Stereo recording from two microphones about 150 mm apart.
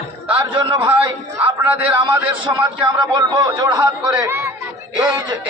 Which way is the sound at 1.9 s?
10° right (ahead or behind).